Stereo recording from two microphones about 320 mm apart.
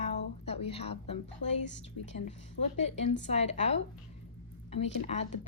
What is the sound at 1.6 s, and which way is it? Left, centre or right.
Speech, left.